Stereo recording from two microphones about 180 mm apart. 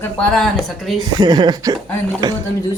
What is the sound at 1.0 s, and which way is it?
Speech, 20° right (ahead or behind).